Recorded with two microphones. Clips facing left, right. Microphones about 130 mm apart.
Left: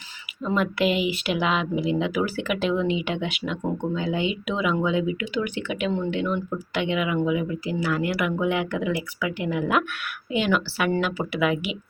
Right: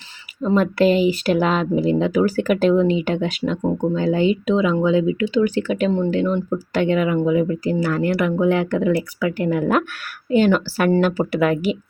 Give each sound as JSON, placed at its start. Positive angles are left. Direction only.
{"t": 0.4, "sound": "speech", "side_deg": -35}